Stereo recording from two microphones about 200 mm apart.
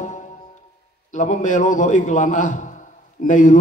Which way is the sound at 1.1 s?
40° left (ahead or behind).